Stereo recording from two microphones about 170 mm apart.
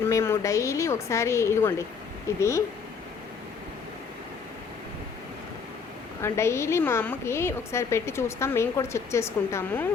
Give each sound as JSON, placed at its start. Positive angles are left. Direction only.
{"t": 0.0, "sound": "a woman's voice", "side_deg": 15}
{"t": 6.2, "sound": "a woman's voice", "side_deg": 15}